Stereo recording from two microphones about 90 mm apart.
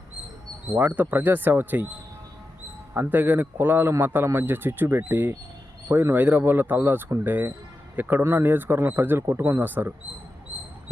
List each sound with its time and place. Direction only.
0.8 s a man's voice: 20° right (ahead or behind)
2.9 s a man's voice: 25° right (ahead or behind)
6.1 s a man's voice: 20° right (ahead or behind)